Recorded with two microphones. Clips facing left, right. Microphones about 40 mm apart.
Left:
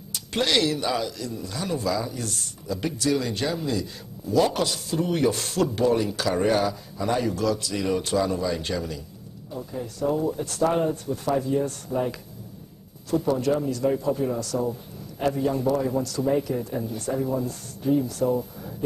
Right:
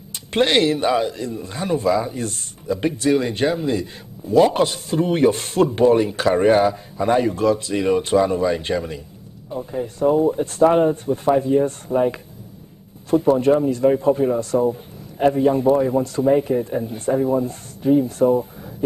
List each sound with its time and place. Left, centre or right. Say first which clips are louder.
0.1 s speech: right 6 dB; right